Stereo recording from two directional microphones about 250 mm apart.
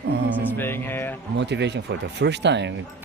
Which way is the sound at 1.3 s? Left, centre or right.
Right.